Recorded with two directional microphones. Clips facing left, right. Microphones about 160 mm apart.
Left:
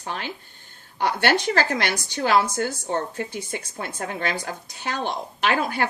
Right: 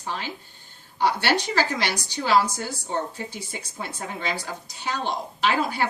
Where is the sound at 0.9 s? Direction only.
50° left (ahead or behind).